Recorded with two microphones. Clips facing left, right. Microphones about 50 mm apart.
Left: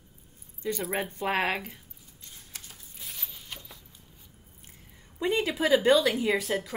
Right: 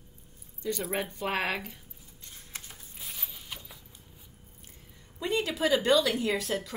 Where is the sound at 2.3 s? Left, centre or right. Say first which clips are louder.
Right 2 dB; right.